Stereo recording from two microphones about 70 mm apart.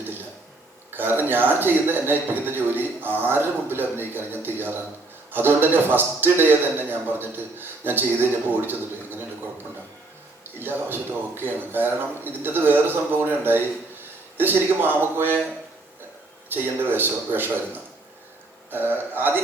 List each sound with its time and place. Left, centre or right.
0.9 s a man's voice: right
10.6 s speech: right
16.5 s speech: right